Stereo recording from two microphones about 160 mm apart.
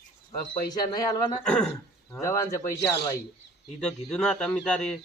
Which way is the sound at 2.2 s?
20° left (ahead or behind).